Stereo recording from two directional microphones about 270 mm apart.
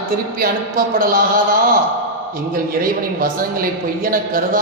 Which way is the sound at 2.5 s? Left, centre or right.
Right.